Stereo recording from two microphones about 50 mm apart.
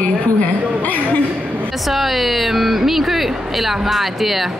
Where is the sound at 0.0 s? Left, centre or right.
Left.